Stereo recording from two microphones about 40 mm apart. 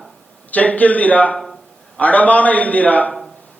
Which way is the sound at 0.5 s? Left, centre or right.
Left.